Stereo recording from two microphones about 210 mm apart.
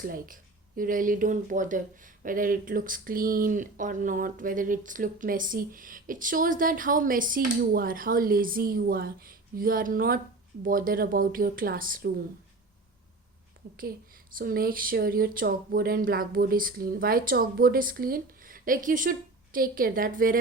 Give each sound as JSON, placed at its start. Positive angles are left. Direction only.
{"t": 0.0, "sound": "speech", "side_deg": -40}
{"t": 14.3, "sound": "speech", "side_deg": -45}